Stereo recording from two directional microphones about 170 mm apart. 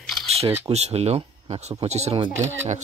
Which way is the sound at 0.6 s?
40° right (ahead or behind).